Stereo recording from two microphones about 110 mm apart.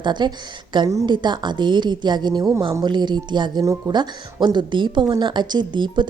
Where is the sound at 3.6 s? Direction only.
35° right (ahead or behind).